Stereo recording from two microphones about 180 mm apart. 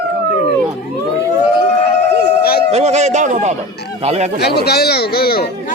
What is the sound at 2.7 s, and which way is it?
Speech, 40° right (ahead or behind).